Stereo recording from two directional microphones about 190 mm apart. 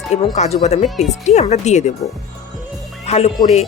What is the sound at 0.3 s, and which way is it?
Speech, 35° left (ahead or behind).